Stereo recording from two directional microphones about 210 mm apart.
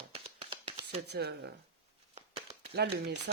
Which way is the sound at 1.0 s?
50° right (ahead or behind).